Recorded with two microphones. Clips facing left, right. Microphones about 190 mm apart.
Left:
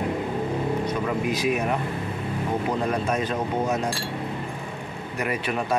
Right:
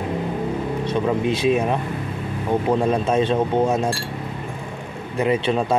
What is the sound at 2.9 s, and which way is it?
A man's voice, 25° right (ahead or behind).